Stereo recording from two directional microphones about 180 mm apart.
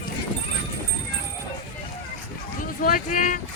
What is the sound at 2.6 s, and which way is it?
Speech, 50° left (ahead or behind).